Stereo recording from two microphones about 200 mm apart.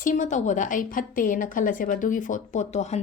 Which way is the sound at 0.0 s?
40° left (ahead or behind).